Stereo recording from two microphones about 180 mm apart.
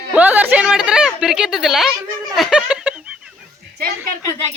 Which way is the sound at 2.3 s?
5° right (ahead or behind).